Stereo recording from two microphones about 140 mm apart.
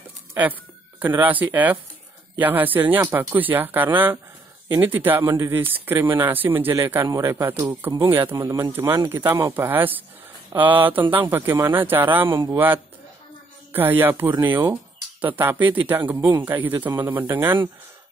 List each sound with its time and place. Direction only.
0.3 s speech: 15° right (ahead or behind)
13.7 s speech: 15° right (ahead or behind)